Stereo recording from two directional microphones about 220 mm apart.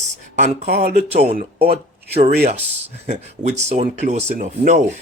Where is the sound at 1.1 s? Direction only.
30° right (ahead or behind).